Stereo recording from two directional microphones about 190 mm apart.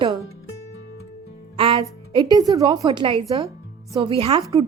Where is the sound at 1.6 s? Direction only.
30° right (ahead or behind).